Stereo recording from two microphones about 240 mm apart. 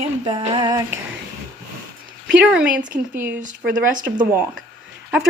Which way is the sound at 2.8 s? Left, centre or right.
Right.